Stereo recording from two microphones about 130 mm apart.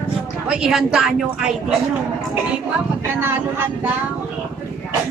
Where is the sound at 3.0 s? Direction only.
15° right (ahead or behind).